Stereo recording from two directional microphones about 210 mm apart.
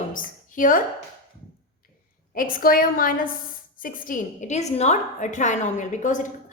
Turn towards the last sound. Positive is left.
turn(degrees=35)  # may be behind; listen again after turning